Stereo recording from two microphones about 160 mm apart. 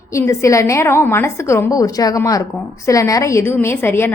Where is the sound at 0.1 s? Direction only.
20° left (ahead or behind).